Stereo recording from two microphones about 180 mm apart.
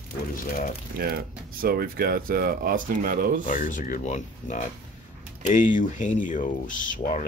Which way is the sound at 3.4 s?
45° left (ahead or behind).